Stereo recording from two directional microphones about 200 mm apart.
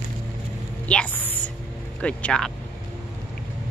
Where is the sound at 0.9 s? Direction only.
5° left (ahead or behind).